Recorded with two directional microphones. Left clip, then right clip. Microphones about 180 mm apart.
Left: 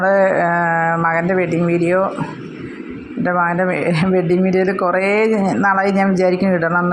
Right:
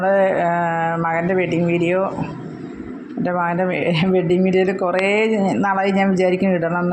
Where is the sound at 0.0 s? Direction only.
20° left (ahead or behind).